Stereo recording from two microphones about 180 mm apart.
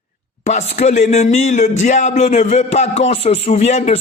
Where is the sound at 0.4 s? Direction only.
40° left (ahead or behind).